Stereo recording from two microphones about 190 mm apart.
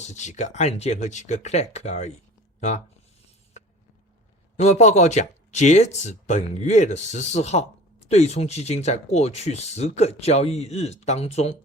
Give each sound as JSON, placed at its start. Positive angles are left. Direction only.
{"t": 0.0, "sound": "speech", "side_deg": 40}
{"t": 4.5, "sound": "speech", "side_deg": 35}